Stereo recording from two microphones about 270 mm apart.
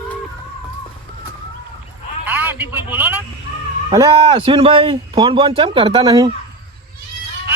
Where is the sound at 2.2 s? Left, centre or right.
Centre.